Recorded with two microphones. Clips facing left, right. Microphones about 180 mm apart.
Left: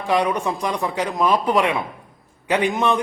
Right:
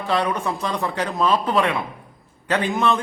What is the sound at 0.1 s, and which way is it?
A man's voice, 15° left (ahead or behind).